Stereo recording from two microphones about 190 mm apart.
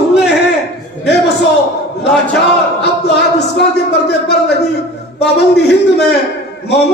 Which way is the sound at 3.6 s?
60° left (ahead or behind).